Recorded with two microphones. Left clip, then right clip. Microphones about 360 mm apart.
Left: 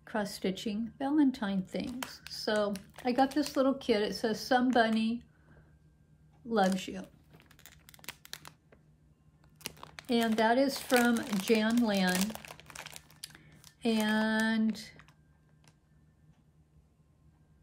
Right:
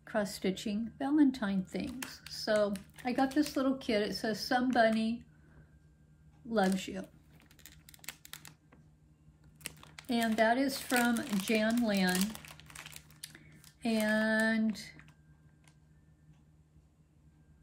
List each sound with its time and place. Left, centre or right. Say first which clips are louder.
0.0 s a woman's voice: right 1 dB; centre
6.5 s a woman's voice: left 2 dB; centre
9.6 s crumpling: left 3 dB; centre
10.0 s a woman's voice: left 1 dB; centre
12.2 s crumpling: left 2 dB; centre
13.2 s a sound: left 2 dB; centre